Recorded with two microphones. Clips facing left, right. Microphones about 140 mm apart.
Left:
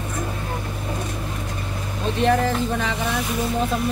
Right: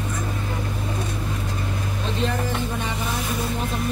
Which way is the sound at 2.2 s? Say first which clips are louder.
Left 8 dB; 90° left.